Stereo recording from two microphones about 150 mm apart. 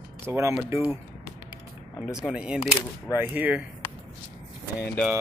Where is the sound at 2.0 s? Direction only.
5° right (ahead or behind).